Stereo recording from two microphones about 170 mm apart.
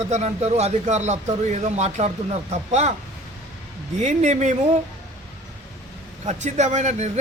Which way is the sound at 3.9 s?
45° right (ahead or behind).